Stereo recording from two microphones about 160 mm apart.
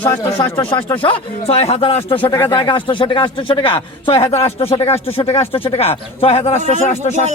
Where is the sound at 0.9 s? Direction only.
35° left (ahead or behind).